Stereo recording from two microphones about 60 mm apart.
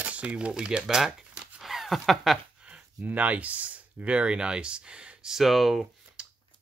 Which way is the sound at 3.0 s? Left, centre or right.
Right.